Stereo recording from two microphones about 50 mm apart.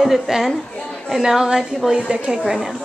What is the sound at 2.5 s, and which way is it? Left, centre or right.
Speech, centre.